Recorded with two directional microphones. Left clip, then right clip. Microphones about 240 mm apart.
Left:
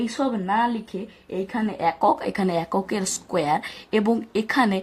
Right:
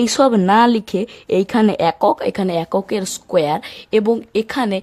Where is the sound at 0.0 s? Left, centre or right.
Right.